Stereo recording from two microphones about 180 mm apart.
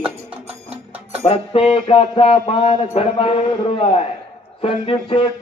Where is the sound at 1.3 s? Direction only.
35° left (ahead or behind).